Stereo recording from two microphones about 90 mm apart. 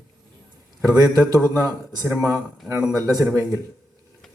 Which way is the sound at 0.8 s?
40° right (ahead or behind).